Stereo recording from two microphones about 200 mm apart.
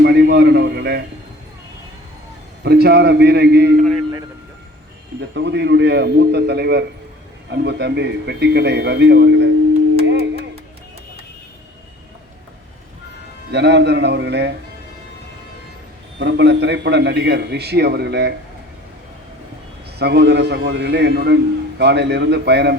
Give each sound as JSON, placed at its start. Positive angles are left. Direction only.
{"t": 0.0, "sound": "a man's voice", "side_deg": -55}
{"t": 2.6, "sound": "a man's voice", "side_deg": -55}
{"t": 5.3, "sound": "a man's voice", "side_deg": -60}
{"t": 10.0, "sound": "tuning fork", "side_deg": -55}
{"t": 13.5, "sound": "a man's voice", "side_deg": -60}
{"t": 16.1, "sound": "a man's voice", "side_deg": -60}
{"t": 20.0, "sound": "a man's voice", "side_deg": -55}